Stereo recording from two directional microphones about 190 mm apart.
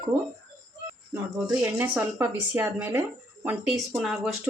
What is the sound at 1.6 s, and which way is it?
A woman's voice, 10° right (ahead or behind).